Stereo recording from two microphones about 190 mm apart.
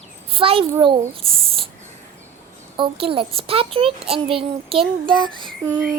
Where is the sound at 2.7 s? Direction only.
30° right (ahead or behind).